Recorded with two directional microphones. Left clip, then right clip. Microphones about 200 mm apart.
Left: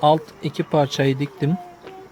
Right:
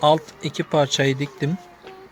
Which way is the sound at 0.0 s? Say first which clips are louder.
Even; 5° left (ahead or behind).